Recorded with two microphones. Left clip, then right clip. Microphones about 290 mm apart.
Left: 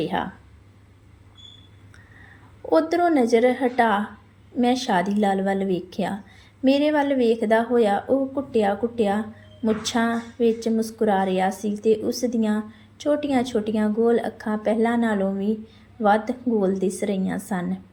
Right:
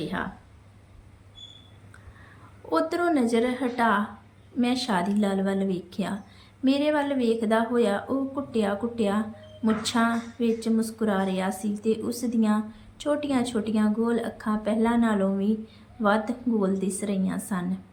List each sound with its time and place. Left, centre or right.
0.0 s a woman's voice: centre
2.6 s a woman's voice: centre